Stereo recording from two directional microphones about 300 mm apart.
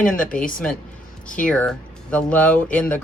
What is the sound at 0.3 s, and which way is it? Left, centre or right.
Speech, left.